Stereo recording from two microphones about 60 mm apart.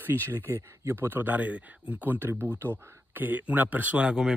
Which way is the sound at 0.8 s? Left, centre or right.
Right.